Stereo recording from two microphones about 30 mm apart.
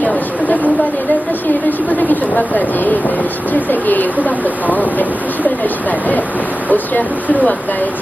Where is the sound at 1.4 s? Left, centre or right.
Left.